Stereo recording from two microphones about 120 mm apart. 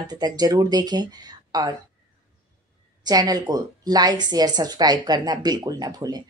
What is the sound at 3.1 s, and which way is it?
Speech, 30° right (ahead or behind).